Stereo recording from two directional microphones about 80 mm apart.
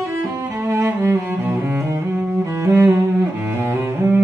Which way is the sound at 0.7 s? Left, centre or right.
Right.